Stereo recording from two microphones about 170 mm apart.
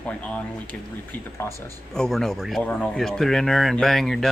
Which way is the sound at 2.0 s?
Centre (ahead or behind).